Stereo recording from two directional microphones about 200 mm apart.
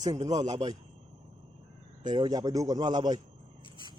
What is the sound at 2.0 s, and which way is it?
Speech, 20° right (ahead or behind).